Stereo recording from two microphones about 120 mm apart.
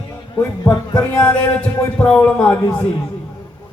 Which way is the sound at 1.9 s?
15° left (ahead or behind).